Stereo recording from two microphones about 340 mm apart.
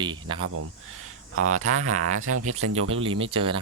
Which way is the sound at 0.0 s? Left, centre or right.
Centre.